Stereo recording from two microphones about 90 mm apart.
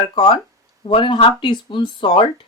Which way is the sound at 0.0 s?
70° left (ahead or behind).